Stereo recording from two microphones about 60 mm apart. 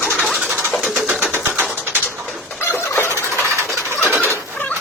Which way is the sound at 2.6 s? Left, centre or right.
Left.